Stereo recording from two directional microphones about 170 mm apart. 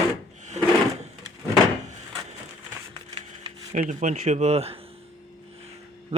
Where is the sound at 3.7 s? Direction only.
45° right (ahead or behind).